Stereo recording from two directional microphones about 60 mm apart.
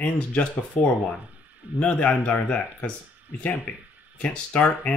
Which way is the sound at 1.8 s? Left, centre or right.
Left.